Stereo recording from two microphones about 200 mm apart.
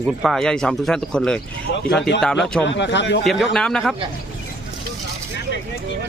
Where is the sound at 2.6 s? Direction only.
65° left (ahead or behind).